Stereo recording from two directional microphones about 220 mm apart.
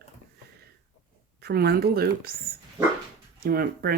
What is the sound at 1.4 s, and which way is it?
Speech, 45° right (ahead or behind).